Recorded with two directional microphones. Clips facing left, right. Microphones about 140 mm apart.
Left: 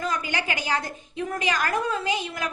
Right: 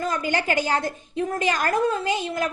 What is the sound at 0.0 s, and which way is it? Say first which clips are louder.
A woman's voice: right 4 dB; 45° right (ahead or behind).